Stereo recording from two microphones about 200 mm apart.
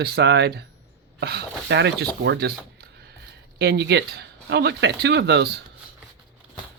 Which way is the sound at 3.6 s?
55° right (ahead or behind).